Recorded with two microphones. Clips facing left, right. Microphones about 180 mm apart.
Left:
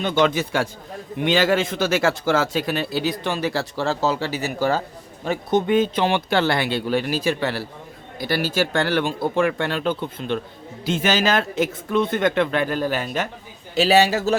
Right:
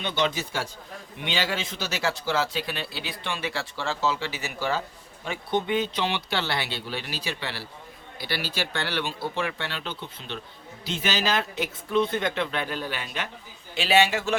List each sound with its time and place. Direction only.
0.0 s a man's voice: 50° left (ahead or behind)